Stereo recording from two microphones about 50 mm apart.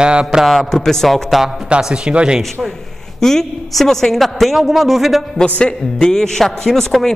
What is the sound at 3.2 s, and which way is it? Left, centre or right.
A man's voice, centre.